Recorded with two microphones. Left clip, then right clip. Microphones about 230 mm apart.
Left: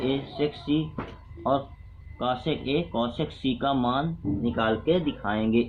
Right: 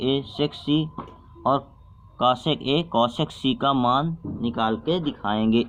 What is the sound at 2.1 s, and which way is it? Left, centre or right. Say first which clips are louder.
Speech: right 6 dB; right.